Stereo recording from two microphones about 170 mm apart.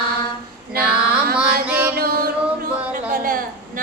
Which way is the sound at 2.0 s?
60° right (ahead or behind).